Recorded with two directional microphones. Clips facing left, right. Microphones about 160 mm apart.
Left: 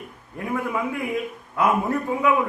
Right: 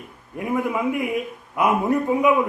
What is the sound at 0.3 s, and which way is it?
A man's voice, 20° right (ahead or behind).